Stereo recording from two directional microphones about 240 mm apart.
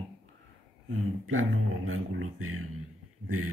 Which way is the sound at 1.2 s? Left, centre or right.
Right.